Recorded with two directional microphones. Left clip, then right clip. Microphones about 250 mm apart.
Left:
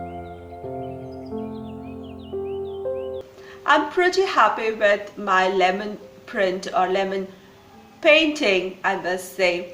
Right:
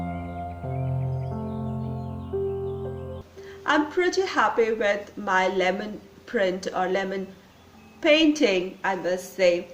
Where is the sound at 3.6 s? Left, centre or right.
Right.